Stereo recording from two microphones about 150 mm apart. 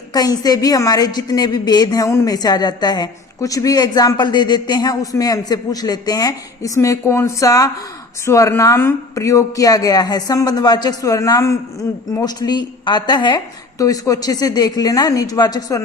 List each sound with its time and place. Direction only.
0.1 s a woman's voice: 25° left (ahead or behind)